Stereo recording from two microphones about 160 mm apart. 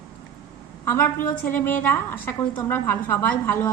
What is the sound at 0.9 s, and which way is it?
A woman's voice, 15° left (ahead or behind).